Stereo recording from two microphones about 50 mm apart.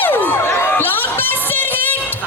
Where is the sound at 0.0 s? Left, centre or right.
Left.